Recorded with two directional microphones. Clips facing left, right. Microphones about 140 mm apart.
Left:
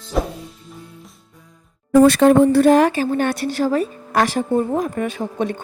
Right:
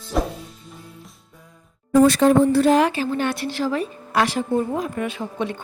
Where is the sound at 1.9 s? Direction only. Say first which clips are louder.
Left 3 dB; 65° left (ahead or behind).